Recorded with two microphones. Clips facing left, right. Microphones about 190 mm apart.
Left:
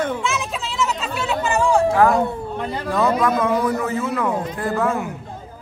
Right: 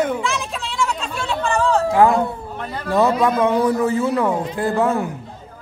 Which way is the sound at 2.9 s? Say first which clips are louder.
Right 3 dB; 25° right (ahead or behind).